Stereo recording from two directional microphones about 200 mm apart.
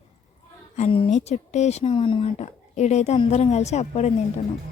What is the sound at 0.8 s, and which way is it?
Speech, 30° left (ahead or behind).